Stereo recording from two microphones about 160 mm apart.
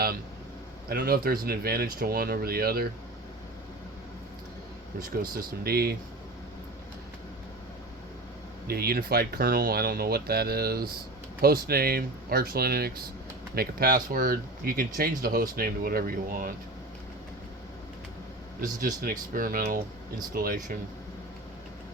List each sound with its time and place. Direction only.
0.9 s speech: 70° right (ahead or behind)
4.9 s speech: 65° right (ahead or behind)
8.6 s speech: 75° right (ahead or behind)
19.3 s speech: 60° right (ahead or behind)